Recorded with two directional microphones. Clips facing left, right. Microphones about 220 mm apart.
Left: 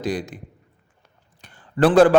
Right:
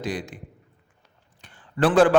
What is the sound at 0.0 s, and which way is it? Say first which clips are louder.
Speech: left 4 dB; 40° left (ahead or behind).